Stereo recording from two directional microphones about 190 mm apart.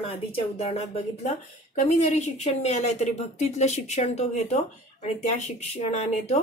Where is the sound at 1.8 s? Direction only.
35° left (ahead or behind).